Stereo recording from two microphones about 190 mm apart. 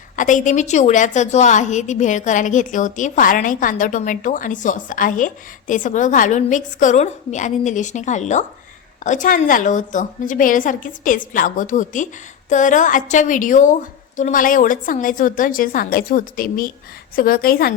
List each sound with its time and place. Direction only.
0.2 s a woman's voice: 40° left (ahead or behind)